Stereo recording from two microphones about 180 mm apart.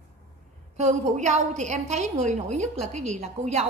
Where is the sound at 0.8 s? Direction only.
40° right (ahead or behind).